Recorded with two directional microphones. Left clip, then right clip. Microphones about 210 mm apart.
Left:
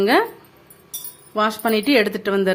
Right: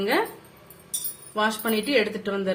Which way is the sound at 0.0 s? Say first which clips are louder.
Left 7 dB; 55° left (ahead or behind).